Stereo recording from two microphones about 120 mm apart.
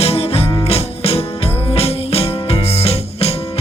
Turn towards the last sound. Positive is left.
turn(degrees=55)  # may be behind; listen again after turning